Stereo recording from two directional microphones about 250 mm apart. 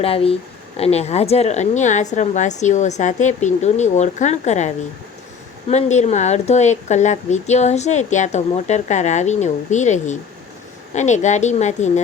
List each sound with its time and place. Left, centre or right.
0.0 s speech: left